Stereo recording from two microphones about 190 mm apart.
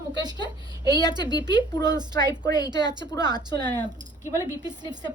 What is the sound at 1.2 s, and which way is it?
Speech, 25° left (ahead or behind).